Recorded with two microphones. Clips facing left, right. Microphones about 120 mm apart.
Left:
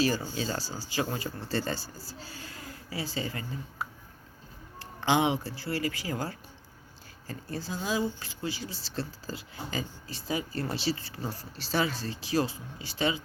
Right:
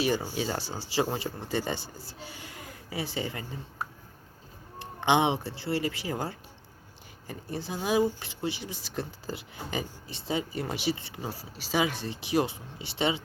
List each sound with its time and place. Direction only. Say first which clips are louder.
0.3 s speech: right 2 dB; 20° right (ahead or behind)
1.5 s speech: even; 15° right (ahead or behind)